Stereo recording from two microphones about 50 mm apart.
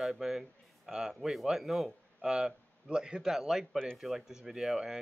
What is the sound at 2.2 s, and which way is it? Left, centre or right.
Speech, centre.